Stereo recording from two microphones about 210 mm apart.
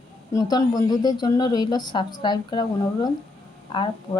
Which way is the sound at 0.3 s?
20° left (ahead or behind).